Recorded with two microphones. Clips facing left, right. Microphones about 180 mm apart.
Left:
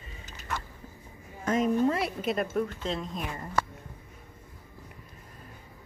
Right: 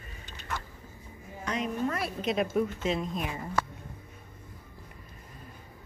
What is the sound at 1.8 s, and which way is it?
Speech, 25° left (ahead or behind).